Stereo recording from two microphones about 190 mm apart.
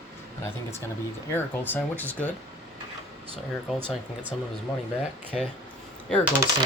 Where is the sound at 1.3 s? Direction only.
10° left (ahead or behind).